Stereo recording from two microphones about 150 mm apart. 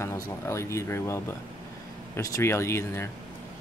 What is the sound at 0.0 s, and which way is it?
Speech, 20° left (ahead or behind).